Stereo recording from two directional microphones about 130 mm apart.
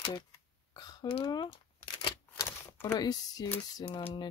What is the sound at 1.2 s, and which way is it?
Speech, 30° left (ahead or behind).